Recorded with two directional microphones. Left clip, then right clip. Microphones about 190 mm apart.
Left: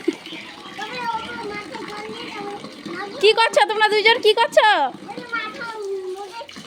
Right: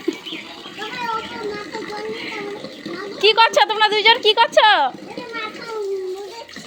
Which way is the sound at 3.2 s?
25° left (ahead or behind).